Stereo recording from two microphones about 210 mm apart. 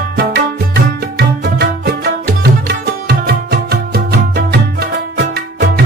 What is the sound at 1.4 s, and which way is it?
Music, 50° right (ahead or behind).